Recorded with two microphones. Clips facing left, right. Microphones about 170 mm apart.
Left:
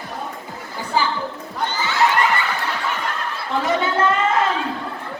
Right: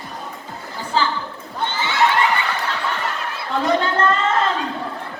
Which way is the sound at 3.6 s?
10° left (ahead or behind).